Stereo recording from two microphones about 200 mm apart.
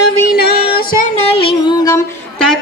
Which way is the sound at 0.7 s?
45° left (ahead or behind).